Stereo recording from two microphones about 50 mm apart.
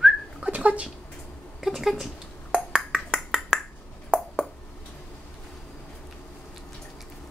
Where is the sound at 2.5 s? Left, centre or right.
Centre.